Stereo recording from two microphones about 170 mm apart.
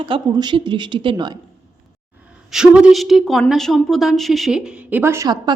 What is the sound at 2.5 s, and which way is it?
Speech, 5° right (ahead or behind).